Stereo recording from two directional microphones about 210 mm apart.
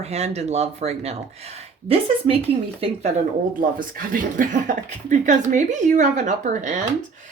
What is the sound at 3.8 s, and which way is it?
Speech, 40° right (ahead or behind).